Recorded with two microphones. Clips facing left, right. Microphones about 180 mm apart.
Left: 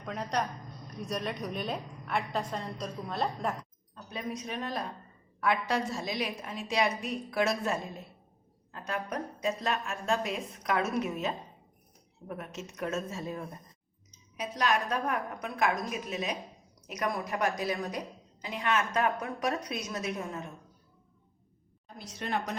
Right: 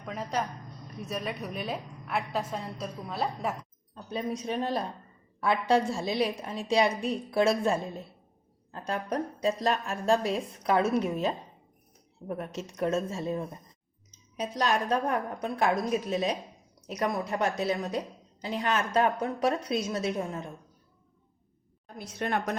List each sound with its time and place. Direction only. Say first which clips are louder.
0.0 s a woman's voice: even; centre (ahead or behind)
3.9 s a woman's voice: right 5 dB; 30° right (ahead or behind)
21.9 s a woman's voice: right 3 dB; 55° right (ahead or behind)